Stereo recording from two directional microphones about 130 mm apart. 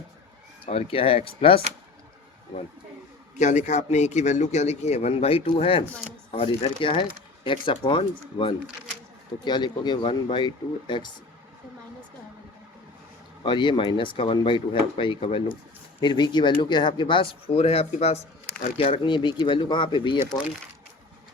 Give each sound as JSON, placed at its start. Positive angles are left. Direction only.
{"t": 0.6, "sound": "speech", "side_deg": 45}
{"t": 3.3, "sound": "speech", "side_deg": 65}
{"t": 13.4, "sound": "speech", "side_deg": 35}
{"t": 16.0, "sound": "speech", "side_deg": 35}
{"t": 18.8, "sound": "speech", "side_deg": 40}